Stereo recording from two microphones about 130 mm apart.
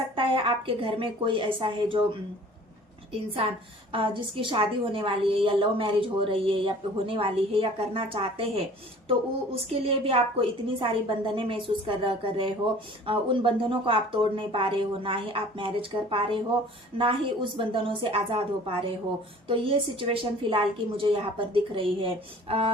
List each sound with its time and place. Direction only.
0.2 s a woman's voice: 45° right (ahead or behind)
3.1 s a woman's voice: 45° right (ahead or behind)